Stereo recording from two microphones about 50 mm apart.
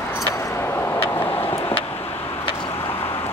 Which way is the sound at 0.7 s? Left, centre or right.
Left.